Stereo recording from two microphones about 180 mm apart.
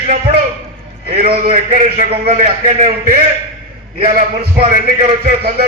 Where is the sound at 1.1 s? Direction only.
35° right (ahead or behind).